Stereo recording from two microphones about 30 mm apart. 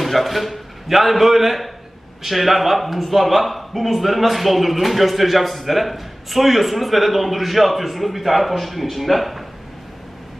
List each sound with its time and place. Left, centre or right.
0.0 s a man's voice: centre